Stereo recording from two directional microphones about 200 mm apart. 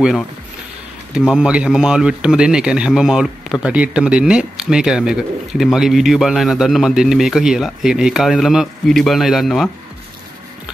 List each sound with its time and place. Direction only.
0.0 s speech: centre (ahead or behind)